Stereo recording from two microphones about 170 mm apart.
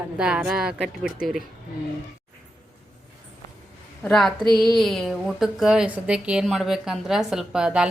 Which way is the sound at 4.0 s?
5° left (ahead or behind).